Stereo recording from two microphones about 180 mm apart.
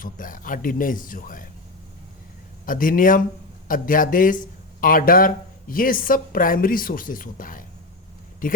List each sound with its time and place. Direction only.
0.0 s a woman's voice: 50° left (ahead or behind)
2.6 s a woman's voice: 50° left (ahead or behind)